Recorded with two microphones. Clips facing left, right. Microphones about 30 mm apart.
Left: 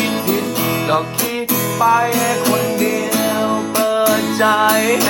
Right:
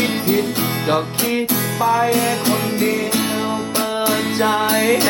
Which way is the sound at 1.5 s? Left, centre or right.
Right.